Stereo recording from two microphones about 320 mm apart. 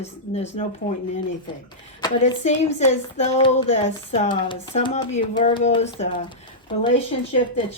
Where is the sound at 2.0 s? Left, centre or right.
Centre.